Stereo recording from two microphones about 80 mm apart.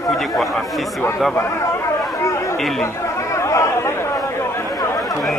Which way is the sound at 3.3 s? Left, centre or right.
Left.